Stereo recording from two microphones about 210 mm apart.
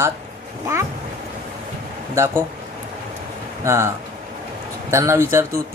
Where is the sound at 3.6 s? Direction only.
10° right (ahead or behind).